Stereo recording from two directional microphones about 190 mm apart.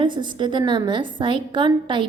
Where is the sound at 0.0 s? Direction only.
25° right (ahead or behind).